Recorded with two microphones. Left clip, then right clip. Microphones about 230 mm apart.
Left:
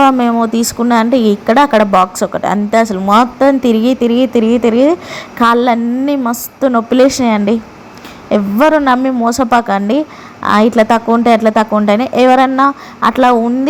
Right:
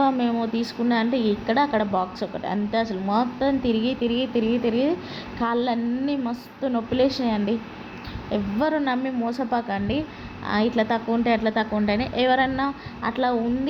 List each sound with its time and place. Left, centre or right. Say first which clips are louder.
0.2 s a woman's voice: left 12 dB; left